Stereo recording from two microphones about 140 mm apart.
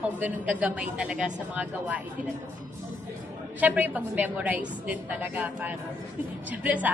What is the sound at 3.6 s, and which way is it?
A woman's voice, 10° right (ahead or behind).